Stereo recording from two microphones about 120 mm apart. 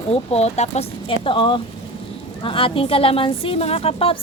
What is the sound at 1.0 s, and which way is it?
A woman's voice, 45° left (ahead or behind).